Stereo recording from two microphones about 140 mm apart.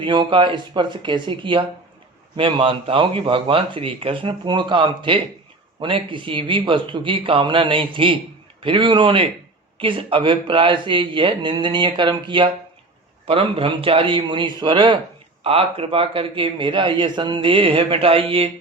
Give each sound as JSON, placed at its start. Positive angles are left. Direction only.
{"t": 0.0, "sound": "a man's voice", "side_deg": -35}